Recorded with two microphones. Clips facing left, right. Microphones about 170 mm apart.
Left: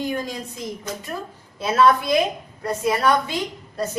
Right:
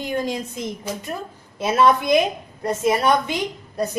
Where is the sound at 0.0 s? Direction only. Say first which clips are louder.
Right 2 dB; 20° right (ahead or behind).